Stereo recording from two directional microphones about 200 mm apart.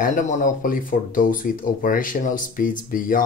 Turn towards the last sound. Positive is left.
turn(degrees=45)  # may be behind; listen again after turning